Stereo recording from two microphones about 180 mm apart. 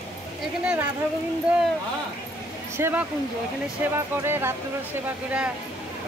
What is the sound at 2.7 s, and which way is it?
A woman's voice, 15° right (ahead or behind).